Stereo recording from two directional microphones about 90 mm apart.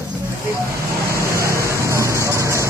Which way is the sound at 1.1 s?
35° right (ahead or behind).